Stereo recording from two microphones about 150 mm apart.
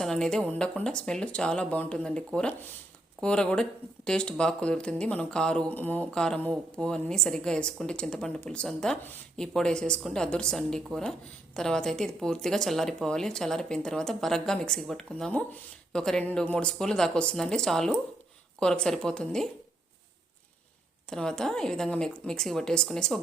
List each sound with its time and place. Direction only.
0.0 s speech: 5° left (ahead or behind)
21.1 s speech: 5° left (ahead or behind)